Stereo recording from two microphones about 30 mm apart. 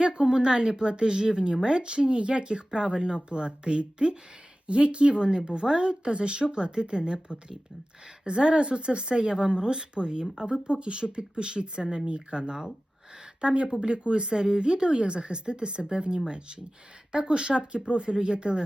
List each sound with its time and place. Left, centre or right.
0.0 s speech: right